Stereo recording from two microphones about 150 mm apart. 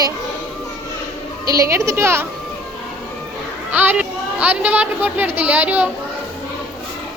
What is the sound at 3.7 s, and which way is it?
A woman's voice, 10° right (ahead or behind).